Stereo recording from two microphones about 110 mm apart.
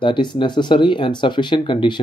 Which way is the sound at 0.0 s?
45° left (ahead or behind).